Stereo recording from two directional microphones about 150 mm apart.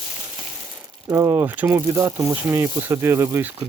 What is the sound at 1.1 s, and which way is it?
Speech, 15° right (ahead or behind).